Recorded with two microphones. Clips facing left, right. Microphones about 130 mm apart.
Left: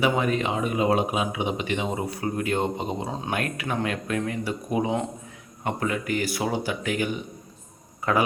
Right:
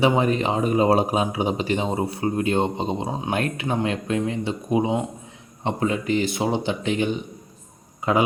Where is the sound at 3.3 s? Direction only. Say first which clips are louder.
Right 4 dB; 25° right (ahead or behind).